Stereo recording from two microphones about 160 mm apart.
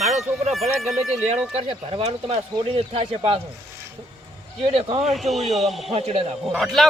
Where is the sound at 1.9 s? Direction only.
35° right (ahead or behind).